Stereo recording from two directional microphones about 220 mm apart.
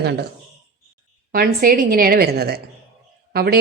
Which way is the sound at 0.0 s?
50° right (ahead or behind).